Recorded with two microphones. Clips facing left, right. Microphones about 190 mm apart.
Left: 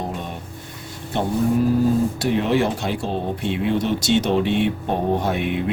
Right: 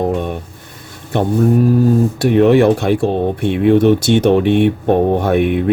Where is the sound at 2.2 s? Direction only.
60° right (ahead or behind).